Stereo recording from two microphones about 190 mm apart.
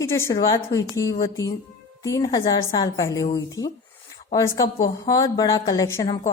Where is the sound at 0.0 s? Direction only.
15° left (ahead or behind).